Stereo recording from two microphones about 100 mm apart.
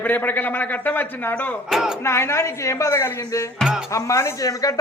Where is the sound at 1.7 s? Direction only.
5° right (ahead or behind).